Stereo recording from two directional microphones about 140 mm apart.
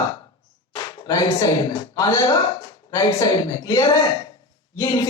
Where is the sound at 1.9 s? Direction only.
25° left (ahead or behind).